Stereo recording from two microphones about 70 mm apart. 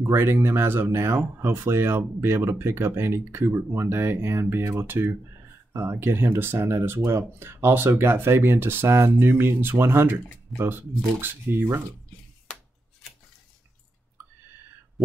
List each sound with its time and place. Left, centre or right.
0.0 s speech: right
15.0 s speech: centre